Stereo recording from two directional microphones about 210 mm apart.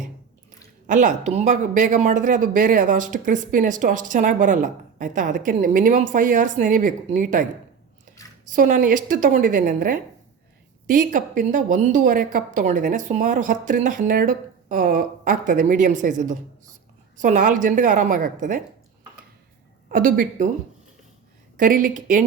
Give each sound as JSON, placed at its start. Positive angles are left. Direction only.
{"t": 0.9, "sound": "speech", "side_deg": -35}
{"t": 8.4, "sound": "speech", "side_deg": -40}
{"t": 19.9, "sound": "speech", "side_deg": -40}
{"t": 21.6, "sound": "speech", "side_deg": -40}